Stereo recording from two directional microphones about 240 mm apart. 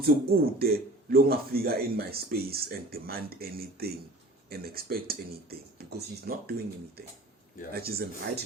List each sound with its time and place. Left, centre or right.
0.0 s speech: right